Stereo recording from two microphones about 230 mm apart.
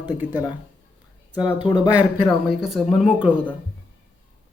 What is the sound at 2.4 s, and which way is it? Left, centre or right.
A woman's voice, centre.